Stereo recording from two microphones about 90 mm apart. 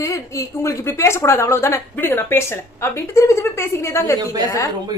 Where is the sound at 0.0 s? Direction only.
35° left (ahead or behind).